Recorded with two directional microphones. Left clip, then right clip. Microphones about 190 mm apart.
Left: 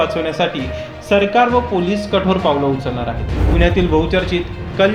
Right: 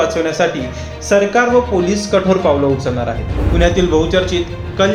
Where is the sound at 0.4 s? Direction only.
30° left (ahead or behind).